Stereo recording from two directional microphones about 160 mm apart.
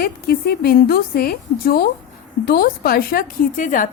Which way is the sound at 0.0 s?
70° left (ahead or behind).